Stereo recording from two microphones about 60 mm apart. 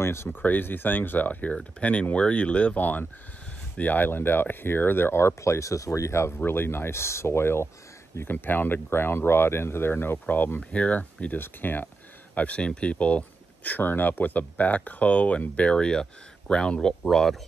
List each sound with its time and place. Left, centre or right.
0.0 s speech: left
0.3 s speech: left
8.2 s speech: left
10.6 s speech: left
12.4 s speech: left